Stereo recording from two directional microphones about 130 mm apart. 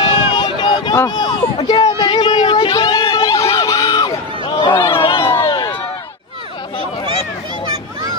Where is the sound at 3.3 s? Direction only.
25° left (ahead or behind).